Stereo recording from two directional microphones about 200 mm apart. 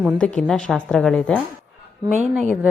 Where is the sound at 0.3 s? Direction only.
Centre (ahead or behind).